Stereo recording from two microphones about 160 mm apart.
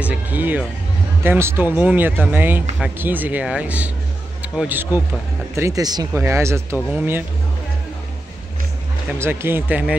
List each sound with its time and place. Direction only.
0.0 s speech: 10° right (ahead or behind)
9.2 s speech: 15° right (ahead or behind)